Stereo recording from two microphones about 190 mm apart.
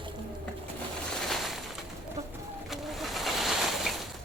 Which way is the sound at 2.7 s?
Centre (ahead or behind).